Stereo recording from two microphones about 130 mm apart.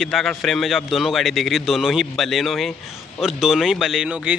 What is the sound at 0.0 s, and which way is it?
Speech, 5° left (ahead or behind).